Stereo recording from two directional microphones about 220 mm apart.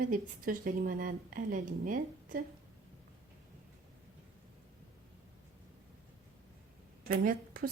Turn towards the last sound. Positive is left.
turn(degrees=-40)  # may be behind; listen again after turning